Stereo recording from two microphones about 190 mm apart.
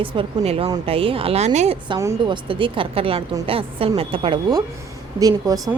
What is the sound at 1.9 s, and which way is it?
A woman's voice, 20° right (ahead or behind).